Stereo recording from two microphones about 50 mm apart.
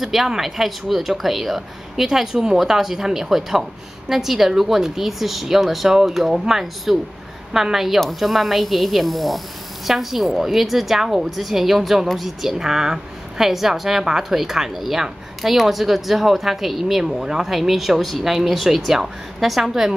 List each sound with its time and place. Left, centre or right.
0.0 s a woman's voice: centre